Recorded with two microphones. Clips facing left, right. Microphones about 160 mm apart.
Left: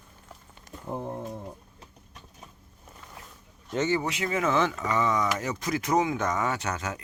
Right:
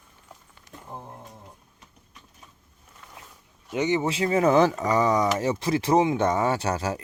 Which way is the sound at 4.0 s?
30° right (ahead or behind).